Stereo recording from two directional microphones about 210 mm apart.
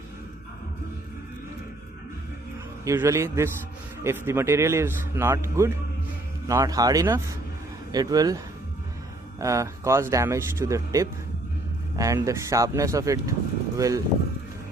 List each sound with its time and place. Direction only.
2.8 s speech: 10° right (ahead or behind)
9.4 s speech: 15° right (ahead or behind)